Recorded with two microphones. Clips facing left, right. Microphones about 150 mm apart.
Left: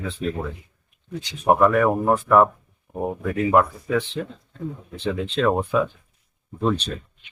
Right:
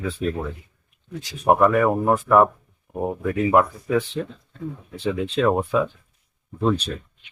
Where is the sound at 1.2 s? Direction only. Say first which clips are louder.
Even; 5° right (ahead or behind).